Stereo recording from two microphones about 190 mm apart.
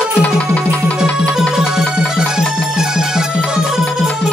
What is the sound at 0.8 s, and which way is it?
Music, 5° left (ahead or behind).